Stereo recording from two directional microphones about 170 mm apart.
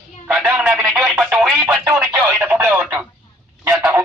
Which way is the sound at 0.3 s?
5° right (ahead or behind).